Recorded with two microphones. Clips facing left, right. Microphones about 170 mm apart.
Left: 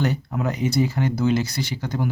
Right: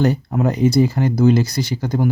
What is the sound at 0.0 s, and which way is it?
Speech, 40° right (ahead or behind).